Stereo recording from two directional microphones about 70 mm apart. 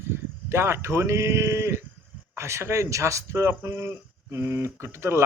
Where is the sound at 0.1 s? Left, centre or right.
Right.